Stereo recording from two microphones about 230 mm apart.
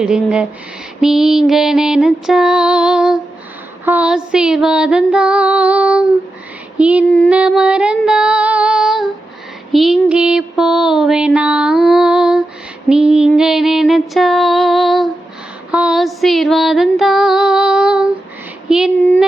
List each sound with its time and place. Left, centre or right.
0.0 s female singing: centre
9.7 s mantra: centre
12.9 s female singing: centre
18.7 s a sound: centre